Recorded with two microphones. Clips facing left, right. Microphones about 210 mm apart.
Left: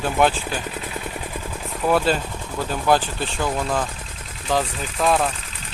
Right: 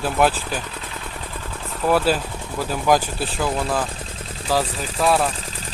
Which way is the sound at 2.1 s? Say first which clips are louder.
Right 1 dB; 5° right (ahead or behind).